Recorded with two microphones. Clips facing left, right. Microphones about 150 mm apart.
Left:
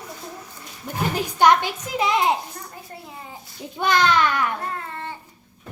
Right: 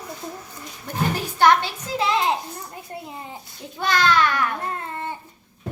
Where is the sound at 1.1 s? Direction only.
15° left (ahead or behind).